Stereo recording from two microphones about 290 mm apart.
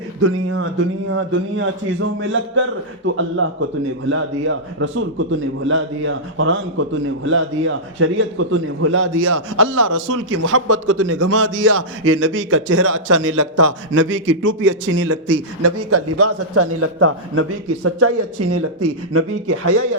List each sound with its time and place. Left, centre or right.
0.2 s a man's voice: right
9.8 s speech: right
10.2 s a man's voice: right
13.3 s speech: right
13.9 s a man's voice: right